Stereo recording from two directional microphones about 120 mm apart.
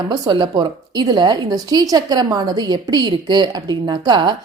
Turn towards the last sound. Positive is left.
turn(degrees=-40)  # may be behind; listen again after turning